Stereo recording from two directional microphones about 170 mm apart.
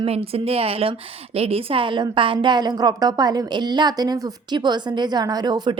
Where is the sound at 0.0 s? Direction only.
35° right (ahead or behind).